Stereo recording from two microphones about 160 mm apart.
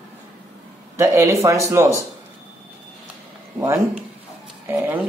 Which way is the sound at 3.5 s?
15° right (ahead or behind).